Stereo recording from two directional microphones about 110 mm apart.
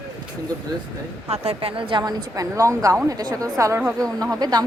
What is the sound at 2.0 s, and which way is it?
Speech, 35° right (ahead or behind).